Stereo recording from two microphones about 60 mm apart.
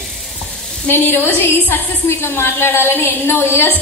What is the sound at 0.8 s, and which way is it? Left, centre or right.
A woman's voice, left.